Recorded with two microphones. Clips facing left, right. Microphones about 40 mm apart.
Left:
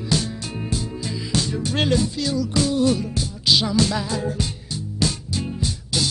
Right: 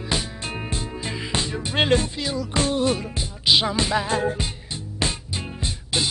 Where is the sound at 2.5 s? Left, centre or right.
Right.